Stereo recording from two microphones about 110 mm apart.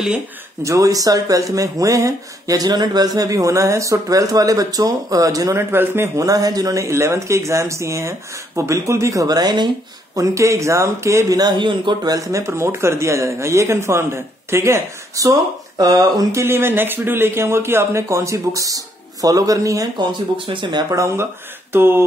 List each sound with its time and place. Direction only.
0.7 s speech: 30° right (ahead or behind)
10.1 s speech: 30° right (ahead or behind)
20.0 s speech: 50° right (ahead or behind)
20.9 s speech: 30° right (ahead or behind)